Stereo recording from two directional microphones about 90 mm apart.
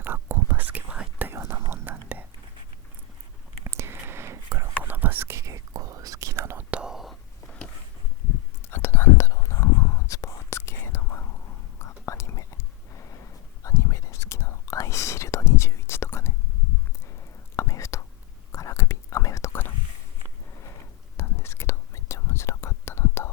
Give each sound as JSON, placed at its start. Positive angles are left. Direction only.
{"t": 0.0, "sound": "whispering", "side_deg": -25}
{"t": 3.6, "sound": "whispering", "side_deg": -30}
{"t": 4.8, "sound": "whispering", "side_deg": -20}
{"t": 6.7, "sound": "whispering", "side_deg": -10}
{"t": 7.4, "sound": "a sound", "side_deg": 10}
{"t": 8.7, "sound": "whispering", "side_deg": 30}
{"t": 17.6, "sound": "whispering", "side_deg": 35}
{"t": 21.2, "sound": "whispering", "side_deg": 30}